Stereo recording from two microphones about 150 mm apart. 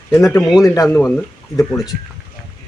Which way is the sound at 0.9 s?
10° left (ahead or behind).